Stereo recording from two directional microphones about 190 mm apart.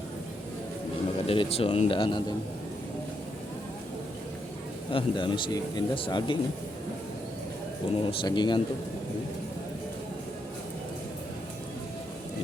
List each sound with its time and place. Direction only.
1.3 s a man's voice: 30° left (ahead or behind)
4.9 s a man's voice: 25° left (ahead or behind)
7.8 s a man's voice: 30° left (ahead or behind)